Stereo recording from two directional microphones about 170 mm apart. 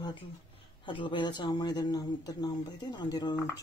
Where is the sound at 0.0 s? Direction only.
30° left (ahead or behind).